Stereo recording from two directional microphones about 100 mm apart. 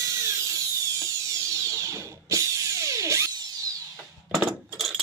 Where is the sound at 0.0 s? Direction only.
30° right (ahead or behind).